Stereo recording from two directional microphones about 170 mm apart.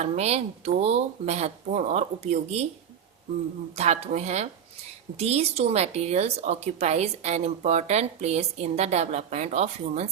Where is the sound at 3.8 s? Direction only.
40° right (ahead or behind).